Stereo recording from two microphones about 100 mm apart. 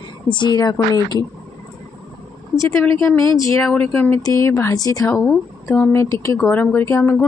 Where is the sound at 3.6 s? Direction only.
20° left (ahead or behind).